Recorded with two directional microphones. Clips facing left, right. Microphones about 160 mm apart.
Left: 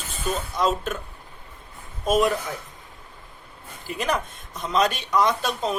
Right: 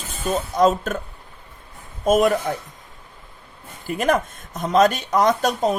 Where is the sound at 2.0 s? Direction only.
45° right (ahead or behind).